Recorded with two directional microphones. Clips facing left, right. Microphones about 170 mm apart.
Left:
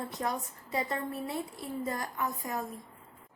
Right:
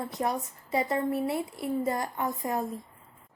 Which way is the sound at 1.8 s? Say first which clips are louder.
Right 5 dB; 25° right (ahead or behind).